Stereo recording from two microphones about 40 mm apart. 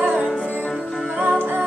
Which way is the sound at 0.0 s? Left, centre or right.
Right.